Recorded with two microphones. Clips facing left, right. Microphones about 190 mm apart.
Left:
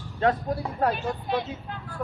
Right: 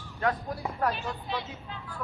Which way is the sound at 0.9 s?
50° left (ahead or behind).